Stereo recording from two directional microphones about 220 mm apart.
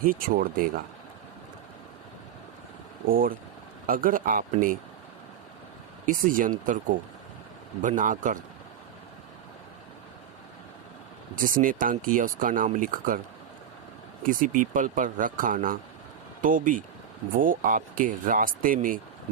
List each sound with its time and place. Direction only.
0.0 s speech: 40° right (ahead or behind)
3.1 s speech: 40° right (ahead or behind)
6.1 s speech: 40° right (ahead or behind)
11.3 s speech: 40° right (ahead or behind)
14.3 s speech: 35° right (ahead or behind)